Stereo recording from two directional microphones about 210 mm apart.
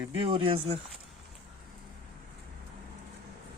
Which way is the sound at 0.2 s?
25° right (ahead or behind).